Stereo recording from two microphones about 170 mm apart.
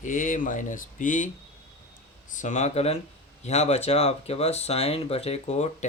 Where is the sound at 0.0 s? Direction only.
50° left (ahead or behind).